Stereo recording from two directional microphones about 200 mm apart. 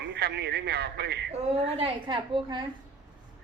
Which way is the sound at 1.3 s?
30° right (ahead or behind).